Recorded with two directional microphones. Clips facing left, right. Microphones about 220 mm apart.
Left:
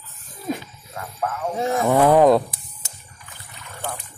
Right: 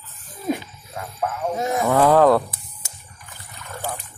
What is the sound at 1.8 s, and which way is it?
Speech, 15° left (ahead or behind).